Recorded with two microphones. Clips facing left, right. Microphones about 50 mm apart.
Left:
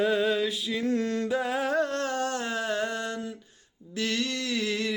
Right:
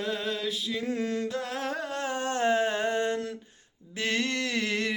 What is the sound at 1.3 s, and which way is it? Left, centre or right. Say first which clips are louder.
Music: left 5 dB; centre.